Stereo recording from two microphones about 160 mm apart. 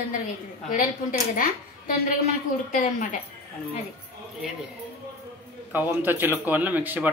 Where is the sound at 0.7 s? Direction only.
55° left (ahead or behind).